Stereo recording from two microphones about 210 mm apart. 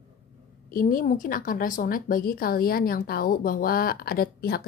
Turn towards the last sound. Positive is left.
turn(degrees=50)  # may be behind; listen again after turning